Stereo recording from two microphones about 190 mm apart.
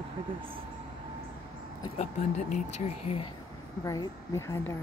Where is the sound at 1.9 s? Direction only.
35° left (ahead or behind).